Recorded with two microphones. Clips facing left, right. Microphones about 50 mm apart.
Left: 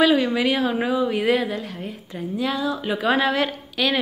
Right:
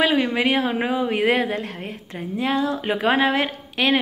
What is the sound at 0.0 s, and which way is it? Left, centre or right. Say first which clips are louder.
A woman's voice: left 1 dB; right.